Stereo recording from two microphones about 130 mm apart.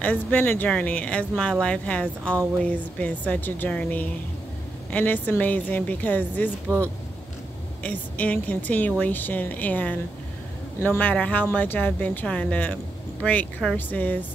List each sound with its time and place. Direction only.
0.0 s speech: 10° left (ahead or behind)
7.8 s speech: 10° left (ahead or behind)